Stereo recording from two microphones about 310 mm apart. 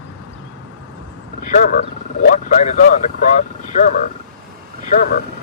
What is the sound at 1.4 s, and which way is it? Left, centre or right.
Speech, left.